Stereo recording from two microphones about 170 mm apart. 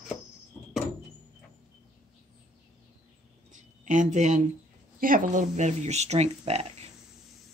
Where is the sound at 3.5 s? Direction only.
45° right (ahead or behind).